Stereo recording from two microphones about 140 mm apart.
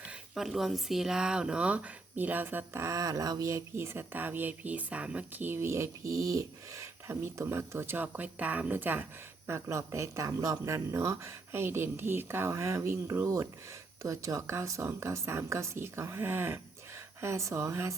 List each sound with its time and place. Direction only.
0.1 s speech: centre (ahead or behind); by 17.9 s 20° right (ahead or behind)